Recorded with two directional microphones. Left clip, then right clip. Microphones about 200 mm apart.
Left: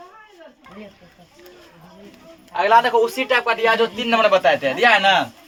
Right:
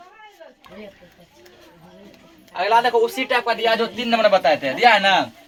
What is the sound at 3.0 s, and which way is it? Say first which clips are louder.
A man's voice: left 1 dB; 40° left (ahead or behind).